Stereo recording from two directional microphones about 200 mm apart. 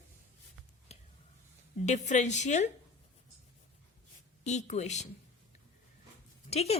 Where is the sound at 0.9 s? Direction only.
35° left (ahead or behind).